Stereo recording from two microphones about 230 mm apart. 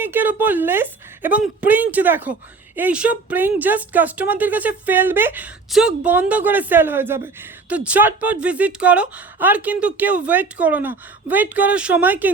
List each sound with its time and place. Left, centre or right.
0.0 s speech: centre